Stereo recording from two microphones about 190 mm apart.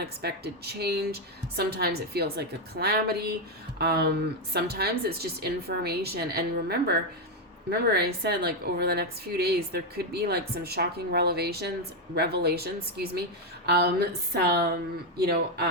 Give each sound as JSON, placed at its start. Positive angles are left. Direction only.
{"t": 0.0, "sound": "a woman's voice", "side_deg": -55}